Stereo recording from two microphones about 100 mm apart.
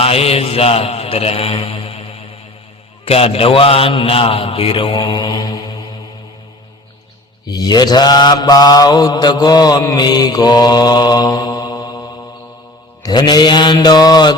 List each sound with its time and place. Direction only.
0.0 s mantra: 75° left (ahead or behind)
3.1 s a man's voice: 75° left (ahead or behind); by 5.7 s 45° left (ahead or behind)
7.4 s mantra: 45° left (ahead or behind)